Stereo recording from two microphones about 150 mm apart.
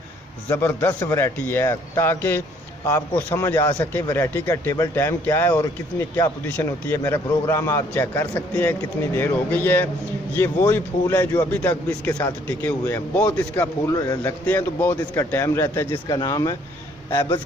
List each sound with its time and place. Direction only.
0.5 s a man's voice: 15° left (ahead or behind)
13.8 s a man's voice: 20° left (ahead or behind)